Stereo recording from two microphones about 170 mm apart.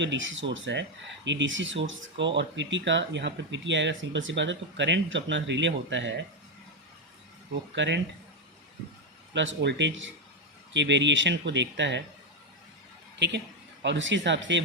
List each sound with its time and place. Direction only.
0.0 s speech: 90° right
7.8 s speech: 90° right
9.3 s speech: 90° right
13.1 s a woman's voice: 90° right